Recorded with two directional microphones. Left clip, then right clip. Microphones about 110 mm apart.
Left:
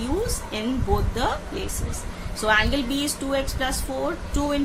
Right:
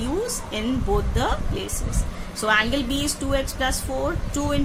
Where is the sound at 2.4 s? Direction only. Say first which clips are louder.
Even; 25° right (ahead or behind).